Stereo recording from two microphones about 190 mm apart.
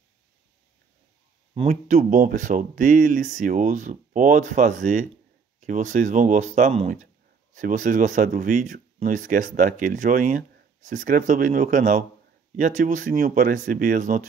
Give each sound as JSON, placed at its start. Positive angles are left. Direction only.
{"t": 1.5, "sound": "speech", "side_deg": -35}